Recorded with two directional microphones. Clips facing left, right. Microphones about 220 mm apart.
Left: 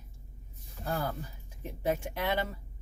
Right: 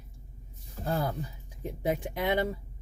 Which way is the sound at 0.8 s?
40° right (ahead or behind).